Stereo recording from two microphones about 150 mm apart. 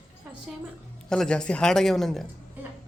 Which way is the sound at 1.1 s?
5° left (ahead or behind).